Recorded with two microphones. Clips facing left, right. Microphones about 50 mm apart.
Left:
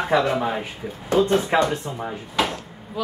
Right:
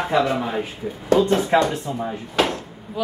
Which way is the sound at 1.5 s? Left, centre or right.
Centre.